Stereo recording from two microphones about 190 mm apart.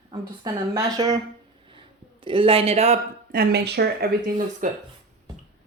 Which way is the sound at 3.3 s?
55° right (ahead or behind).